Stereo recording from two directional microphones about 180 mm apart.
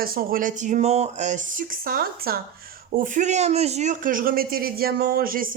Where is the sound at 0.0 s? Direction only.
55° right (ahead or behind).